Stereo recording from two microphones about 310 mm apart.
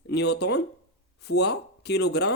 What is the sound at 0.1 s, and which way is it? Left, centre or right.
Speech, left.